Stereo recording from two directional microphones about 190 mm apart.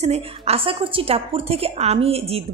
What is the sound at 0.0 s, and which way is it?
Speech, 35° right (ahead or behind).